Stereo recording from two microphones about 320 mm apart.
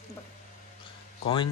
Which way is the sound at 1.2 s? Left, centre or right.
Centre.